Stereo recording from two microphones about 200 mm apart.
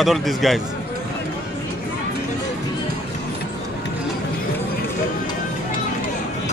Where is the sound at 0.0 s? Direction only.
Centre (ahead or behind).